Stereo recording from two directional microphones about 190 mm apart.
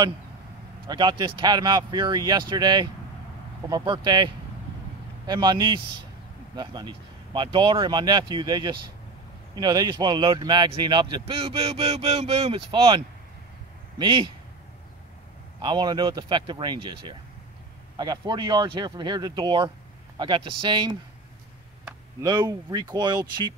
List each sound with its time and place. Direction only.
0.8 s a man's voice: 25° right (ahead or behind)
15.6 s speech: 25° right (ahead or behind)
22.2 s speech: 20° right (ahead or behind)